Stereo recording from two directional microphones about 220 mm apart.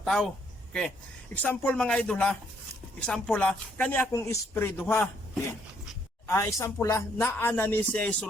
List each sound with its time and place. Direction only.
0.0 s speech: 5° left (ahead or behind)